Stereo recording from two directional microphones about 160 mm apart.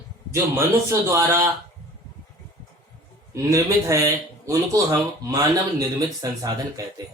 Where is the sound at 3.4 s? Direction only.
20° right (ahead or behind).